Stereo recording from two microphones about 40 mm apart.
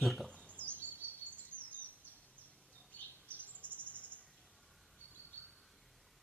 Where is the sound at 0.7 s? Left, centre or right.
Right.